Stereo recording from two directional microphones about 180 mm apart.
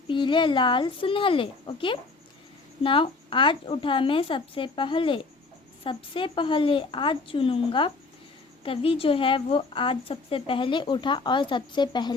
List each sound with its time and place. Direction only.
0.1 s a woman's voice: 25° left (ahead or behind)